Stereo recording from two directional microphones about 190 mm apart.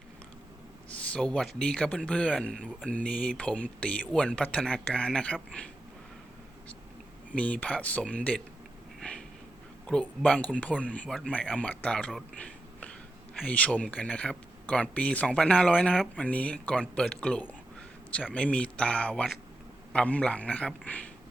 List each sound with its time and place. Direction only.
0.9 s speech: 5° left (ahead or behind)
7.3 s speech: 5° left (ahead or behind)
9.0 s snort: 5° left (ahead or behind)
9.8 s speech: 5° left (ahead or behind)